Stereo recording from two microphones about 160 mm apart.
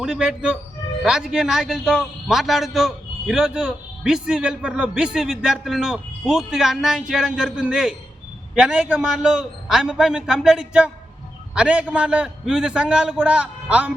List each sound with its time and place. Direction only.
0.0 s a man's voice: 5° right (ahead or behind)